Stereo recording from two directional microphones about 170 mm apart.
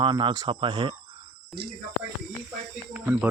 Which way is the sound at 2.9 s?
10° right (ahead or behind).